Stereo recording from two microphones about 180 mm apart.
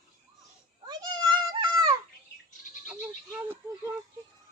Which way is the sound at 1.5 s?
25° right (ahead or behind).